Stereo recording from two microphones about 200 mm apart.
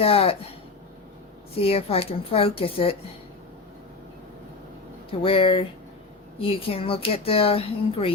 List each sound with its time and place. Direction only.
0.0 s speech: 30° left (ahead or behind)
1.5 s speech: 30° left (ahead or behind)
5.2 s speech: 25° left (ahead or behind)